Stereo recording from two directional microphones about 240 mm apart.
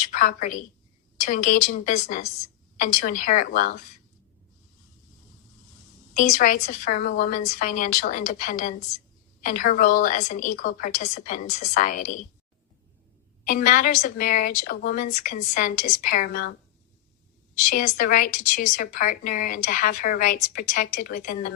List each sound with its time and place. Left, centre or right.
0.1 s a woman's voice: left
6.1 s a woman's voice: left
13.4 s a woman's voice: left
17.7 s a woman's voice: left